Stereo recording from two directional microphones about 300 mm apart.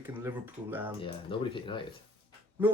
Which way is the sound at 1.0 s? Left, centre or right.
Centre.